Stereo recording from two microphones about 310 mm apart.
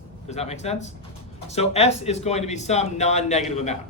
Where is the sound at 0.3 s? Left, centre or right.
Left.